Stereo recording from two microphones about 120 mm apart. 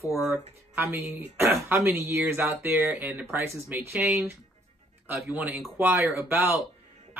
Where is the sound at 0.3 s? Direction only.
20° right (ahead or behind).